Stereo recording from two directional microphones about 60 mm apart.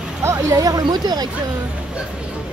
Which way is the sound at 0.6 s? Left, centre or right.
Right.